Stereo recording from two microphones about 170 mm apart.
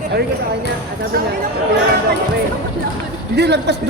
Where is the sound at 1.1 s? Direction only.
65° right (ahead or behind).